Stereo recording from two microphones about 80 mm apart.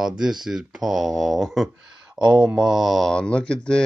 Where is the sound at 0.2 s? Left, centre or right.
Centre.